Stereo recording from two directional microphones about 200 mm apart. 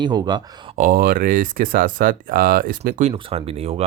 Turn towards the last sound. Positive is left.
turn(degrees=-30)  # may be behind; listen again after turning